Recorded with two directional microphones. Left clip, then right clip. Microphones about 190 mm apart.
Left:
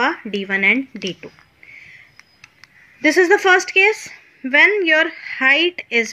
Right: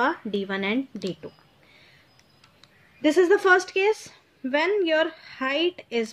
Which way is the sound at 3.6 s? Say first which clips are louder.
Left 9 dB; 35° right (ahead or behind).